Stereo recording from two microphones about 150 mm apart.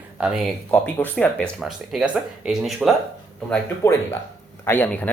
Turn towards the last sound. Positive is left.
turn(degrees=10)  # may be behind; listen again after turning